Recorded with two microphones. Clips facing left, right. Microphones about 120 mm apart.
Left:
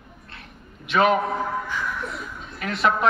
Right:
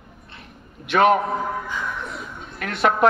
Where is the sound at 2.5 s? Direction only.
70° right (ahead or behind).